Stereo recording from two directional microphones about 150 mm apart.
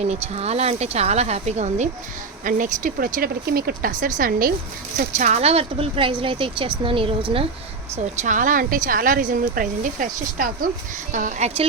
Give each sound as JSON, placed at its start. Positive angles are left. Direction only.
{"t": 0.0, "sound": "speech", "side_deg": -45}
{"t": 2.4, "sound": "speech", "side_deg": -60}
{"t": 4.9, "sound": "speech", "side_deg": -50}
{"t": 8.2, "sound": "speech", "side_deg": -60}